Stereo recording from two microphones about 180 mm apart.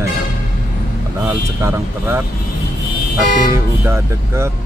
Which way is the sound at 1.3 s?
15° right (ahead or behind).